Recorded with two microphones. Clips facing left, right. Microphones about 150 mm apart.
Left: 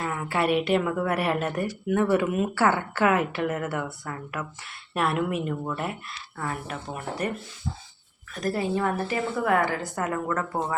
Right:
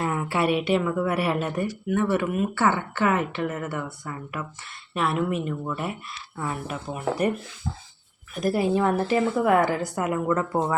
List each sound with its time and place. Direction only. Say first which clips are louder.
0.0 s a sound: right 4 dB; 25° right (ahead or behind)
0.5 s a woman's voice: even; centre (ahead or behind)
6.4 s speech: right 2 dB; 15° right (ahead or behind)
8.5 s a woman's voice: right 4 dB; 20° right (ahead or behind)